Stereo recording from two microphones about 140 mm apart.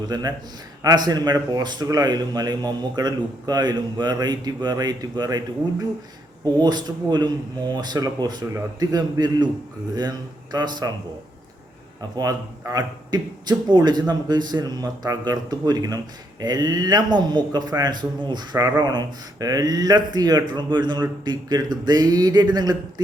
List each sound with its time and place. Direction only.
0.1 s speech: 30° right (ahead or behind)
6.4 s speech: 30° right (ahead or behind)
12.1 s a man's voice: 25° right (ahead or behind)